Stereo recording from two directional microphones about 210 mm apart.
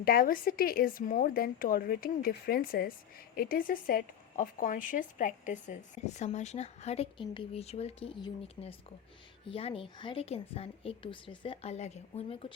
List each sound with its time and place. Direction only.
0.0 s a woman's voice: 45° left (ahead or behind); by 12.5 s 25° left (ahead or behind)